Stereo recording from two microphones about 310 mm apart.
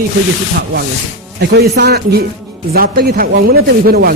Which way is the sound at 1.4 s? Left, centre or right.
Right.